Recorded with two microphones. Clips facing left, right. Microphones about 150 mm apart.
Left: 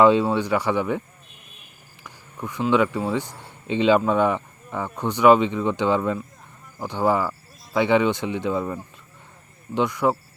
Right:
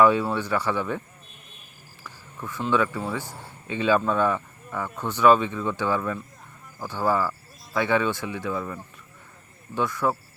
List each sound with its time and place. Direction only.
0.0 s speech: 20° left (ahead or behind)
2.0 s speech: 15° left (ahead or behind)